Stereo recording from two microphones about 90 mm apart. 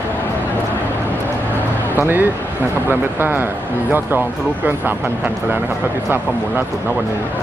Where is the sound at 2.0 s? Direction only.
20° right (ahead or behind).